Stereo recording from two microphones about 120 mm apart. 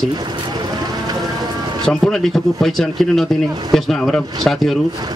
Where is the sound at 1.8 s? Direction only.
5° left (ahead or behind).